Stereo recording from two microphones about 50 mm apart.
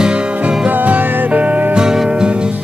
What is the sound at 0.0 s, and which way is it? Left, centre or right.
Music, centre.